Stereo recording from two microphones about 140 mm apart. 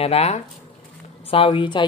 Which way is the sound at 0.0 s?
50° left (ahead or behind).